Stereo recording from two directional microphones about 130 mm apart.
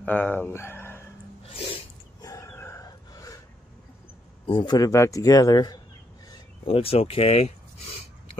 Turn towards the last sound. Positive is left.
turn(degrees=50)  # may be behind; listen again after turning